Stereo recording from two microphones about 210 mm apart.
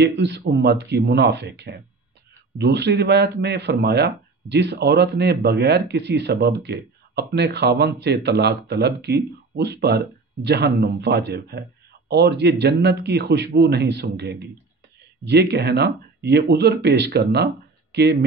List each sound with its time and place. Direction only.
0.0 s speech: 55° right (ahead or behind)